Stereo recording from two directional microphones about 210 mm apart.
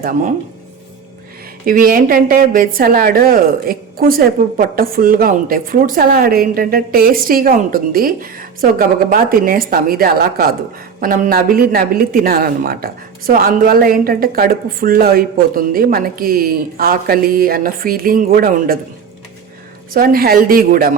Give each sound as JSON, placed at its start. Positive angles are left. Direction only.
{"t": 1.6, "sound": "a woman's voice", "side_deg": -40}
{"t": 19.9, "sound": "a woman's voice", "side_deg": -45}